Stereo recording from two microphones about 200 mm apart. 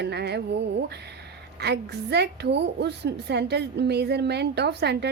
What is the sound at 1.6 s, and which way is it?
A woman's voice, 55° right (ahead or behind).